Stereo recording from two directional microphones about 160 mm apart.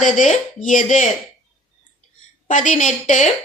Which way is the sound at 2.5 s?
55° left (ahead or behind).